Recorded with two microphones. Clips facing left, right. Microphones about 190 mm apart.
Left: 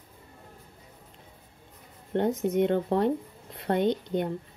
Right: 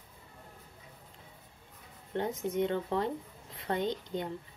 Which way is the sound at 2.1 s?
65° left (ahead or behind).